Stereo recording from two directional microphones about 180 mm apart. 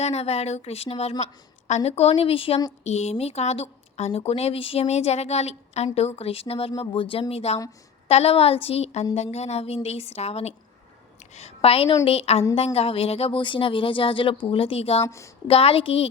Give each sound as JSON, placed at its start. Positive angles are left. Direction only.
{"t": 0.0, "sound": "speech", "side_deg": 35}
{"t": 15.0, "sound": "a woman's voice", "side_deg": 15}
{"t": 15.4, "sound": "speech", "side_deg": 35}